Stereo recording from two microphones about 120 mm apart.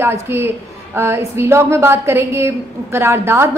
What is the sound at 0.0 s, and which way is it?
A woman's voice, 20° right (ahead or behind).